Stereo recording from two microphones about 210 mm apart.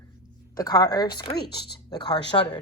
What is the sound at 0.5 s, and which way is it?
A woman's voice, 20° left (ahead or behind).